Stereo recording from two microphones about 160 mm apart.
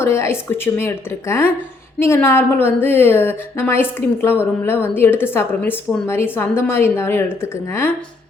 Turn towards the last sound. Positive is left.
turn(degrees=15)  # may be behind; listen again after turning